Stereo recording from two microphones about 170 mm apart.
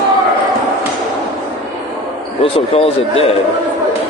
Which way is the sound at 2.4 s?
35° left (ahead or behind).